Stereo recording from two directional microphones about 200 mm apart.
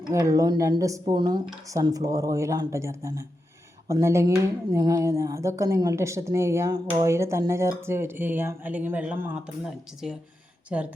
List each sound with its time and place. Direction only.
0.1 s speech: 15° right (ahead or behind)